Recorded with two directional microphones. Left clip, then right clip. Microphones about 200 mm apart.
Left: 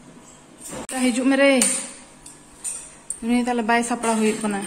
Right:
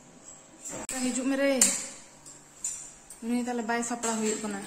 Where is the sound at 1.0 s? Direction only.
Centre (ahead or behind).